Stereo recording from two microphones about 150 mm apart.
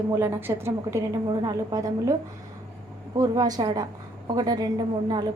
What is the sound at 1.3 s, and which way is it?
Speech, 25° right (ahead or behind).